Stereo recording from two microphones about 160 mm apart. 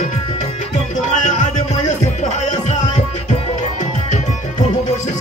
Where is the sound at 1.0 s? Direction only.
50° left (ahead or behind).